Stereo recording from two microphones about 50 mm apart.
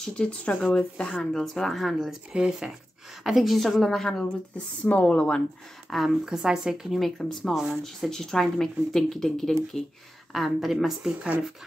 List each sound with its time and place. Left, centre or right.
0.0 s speech: left
1.2 s a woman's voice: centre
2.3 s speech: centre
3.3 s a woman's voice: centre
4.6 s speech: left
5.9 s speech: centre
6.9 s a woman's voice: centre
10.3 s a woman's voice: centre